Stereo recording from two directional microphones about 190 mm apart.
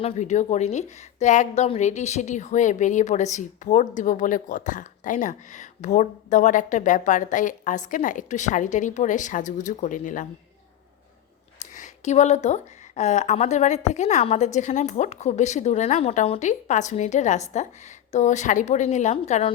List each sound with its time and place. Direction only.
0.0 s a woman's voice: 40° left (ahead or behind)
11.6 s a sound: 40° left (ahead or behind)
13.0 s a woman's voice: 40° left (ahead or behind)